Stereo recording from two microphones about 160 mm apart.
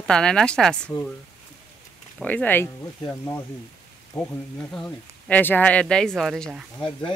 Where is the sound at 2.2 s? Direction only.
10° left (ahead or behind).